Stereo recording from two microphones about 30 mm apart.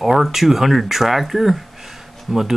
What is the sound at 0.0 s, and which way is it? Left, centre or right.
Speech, centre.